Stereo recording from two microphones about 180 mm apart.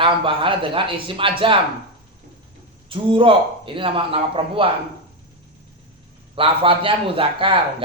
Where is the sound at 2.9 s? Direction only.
30° right (ahead or behind).